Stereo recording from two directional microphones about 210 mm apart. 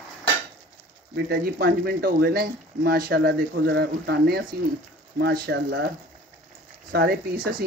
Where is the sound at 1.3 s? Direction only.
45° right (ahead or behind).